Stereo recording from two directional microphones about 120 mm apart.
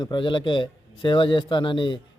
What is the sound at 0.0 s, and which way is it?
A man's voice, 40° left (ahead or behind).